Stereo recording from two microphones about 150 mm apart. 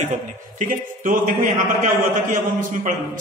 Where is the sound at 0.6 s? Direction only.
65° right (ahead or behind).